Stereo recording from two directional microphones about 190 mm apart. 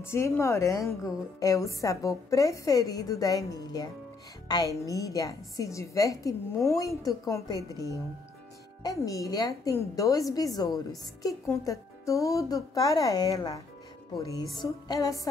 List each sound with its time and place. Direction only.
0.0 s a woman's voice: 15° left (ahead or behind)
8.8 s a woman's voice: 20° left (ahead or behind)